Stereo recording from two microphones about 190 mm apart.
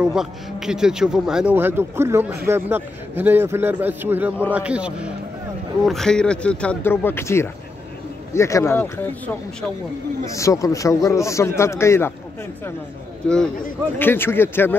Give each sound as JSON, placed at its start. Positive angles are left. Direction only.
{"t": 0.0, "sound": "a man's voice", "side_deg": -5}
{"t": 10.2, "sound": "a man's voice", "side_deg": 15}
{"t": 13.2, "sound": "a man's voice", "side_deg": 5}